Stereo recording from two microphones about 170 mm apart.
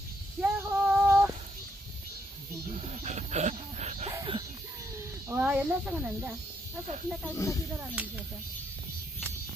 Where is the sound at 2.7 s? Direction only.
40° right (ahead or behind).